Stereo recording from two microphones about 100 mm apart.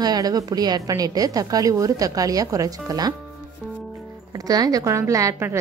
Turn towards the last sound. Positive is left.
turn(degrees=-30)  # may be behind; listen again after turning